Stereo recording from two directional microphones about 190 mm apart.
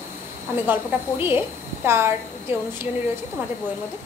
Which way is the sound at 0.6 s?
10° right (ahead or behind).